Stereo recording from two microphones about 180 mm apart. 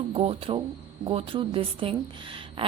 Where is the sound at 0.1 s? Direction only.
35° right (ahead or behind).